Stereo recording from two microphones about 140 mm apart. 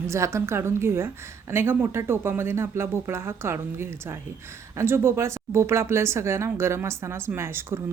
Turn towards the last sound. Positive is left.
turn(degrees=-15)  # may be behind; listen again after turning